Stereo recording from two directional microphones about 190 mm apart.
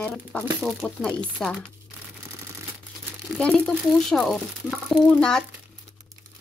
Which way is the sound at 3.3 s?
5° left (ahead or behind).